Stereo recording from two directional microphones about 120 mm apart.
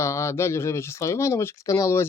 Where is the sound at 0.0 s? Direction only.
25° left (ahead or behind).